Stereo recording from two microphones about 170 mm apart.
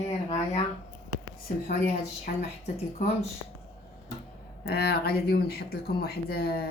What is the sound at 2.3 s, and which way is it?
Speech, 55° left (ahead or behind).